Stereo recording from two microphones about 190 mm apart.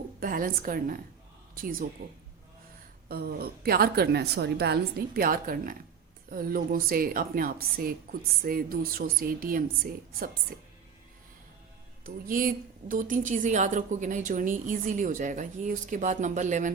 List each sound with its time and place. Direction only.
0.2 s a woman's voice: 50° right (ahead or behind)
3.1 s a woman's voice: 55° right (ahead or behind)
12.0 s a woman's voice: 50° right (ahead or behind)